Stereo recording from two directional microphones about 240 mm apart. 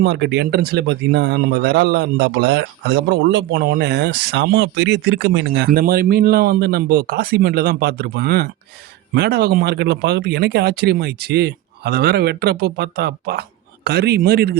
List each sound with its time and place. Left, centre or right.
0.0 s speech: right